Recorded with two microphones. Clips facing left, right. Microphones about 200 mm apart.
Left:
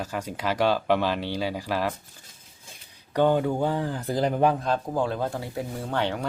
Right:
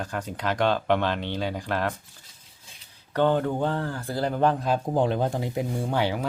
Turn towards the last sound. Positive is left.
turn(degrees=-10)  # may be behind; listen again after turning